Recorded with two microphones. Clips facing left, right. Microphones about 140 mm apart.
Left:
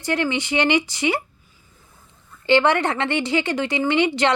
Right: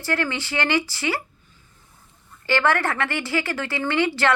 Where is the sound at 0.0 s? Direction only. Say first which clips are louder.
Left 3 dB; 20° left (ahead or behind).